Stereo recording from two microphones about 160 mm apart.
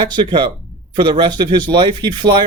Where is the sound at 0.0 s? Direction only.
30° right (ahead or behind).